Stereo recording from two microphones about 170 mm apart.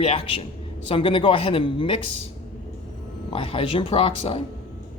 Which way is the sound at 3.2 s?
30° left (ahead or behind).